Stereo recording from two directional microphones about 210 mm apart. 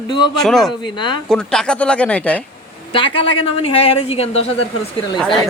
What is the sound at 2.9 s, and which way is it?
Speech, 25° left (ahead or behind).